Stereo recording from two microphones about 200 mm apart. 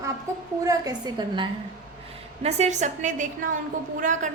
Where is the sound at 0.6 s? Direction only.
20° right (ahead or behind).